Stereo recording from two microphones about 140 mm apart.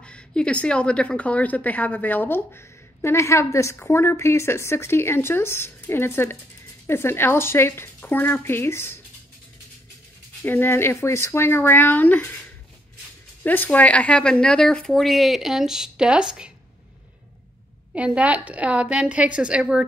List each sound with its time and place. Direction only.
0.0 s a woman's voice: 5° left (ahead or behind)
10.4 s a woman's voice: 15° left (ahead or behind)
13.4 s speech: 15° left (ahead or behind); by 16.5 s 5° right (ahead or behind)
17.9 s a woman's voice: 10° right (ahead or behind)